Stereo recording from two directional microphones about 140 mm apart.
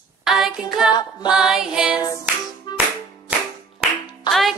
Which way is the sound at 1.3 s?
5° right (ahead or behind).